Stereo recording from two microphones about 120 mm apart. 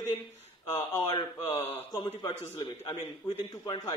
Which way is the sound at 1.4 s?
55° left (ahead or behind).